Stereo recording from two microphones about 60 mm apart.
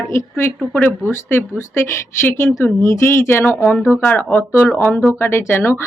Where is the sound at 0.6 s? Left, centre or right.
Left.